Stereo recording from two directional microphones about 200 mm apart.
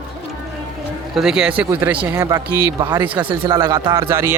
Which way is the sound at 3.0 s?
10° right (ahead or behind).